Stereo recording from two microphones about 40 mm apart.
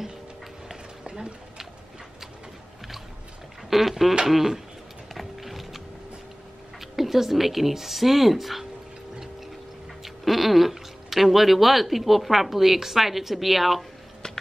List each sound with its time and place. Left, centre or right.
1.0 s a sound: right
3.7 s speech: centre
5.1 s music: centre
6.8 s a woman's voice: centre
10.0 s speech: centre